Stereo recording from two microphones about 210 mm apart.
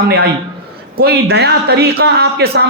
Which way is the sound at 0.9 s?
50° right (ahead or behind).